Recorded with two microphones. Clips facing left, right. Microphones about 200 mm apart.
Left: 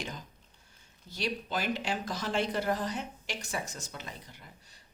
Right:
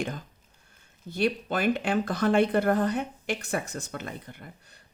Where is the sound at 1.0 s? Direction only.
55° right (ahead or behind).